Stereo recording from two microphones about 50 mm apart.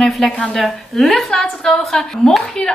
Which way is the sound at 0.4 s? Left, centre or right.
Left.